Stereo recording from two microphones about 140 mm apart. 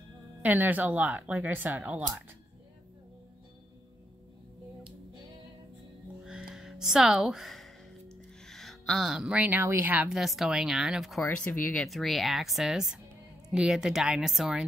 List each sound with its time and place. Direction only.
0.4 s speech: 10° right (ahead or behind)
6.2 s a sound: 5° right (ahead or behind)
8.5 s speech: 5° left (ahead or behind)
11.2 s speech: 10° left (ahead or behind)